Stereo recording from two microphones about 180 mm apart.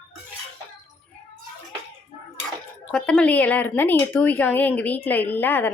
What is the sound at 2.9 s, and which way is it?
A woman's voice, 5° left (ahead or behind).